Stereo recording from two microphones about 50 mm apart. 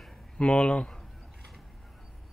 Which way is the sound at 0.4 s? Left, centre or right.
Left.